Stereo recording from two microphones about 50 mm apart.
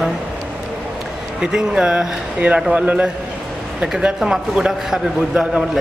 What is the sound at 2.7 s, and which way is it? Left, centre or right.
Speech, right.